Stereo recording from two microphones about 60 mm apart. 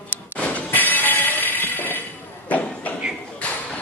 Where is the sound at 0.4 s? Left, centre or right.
Left.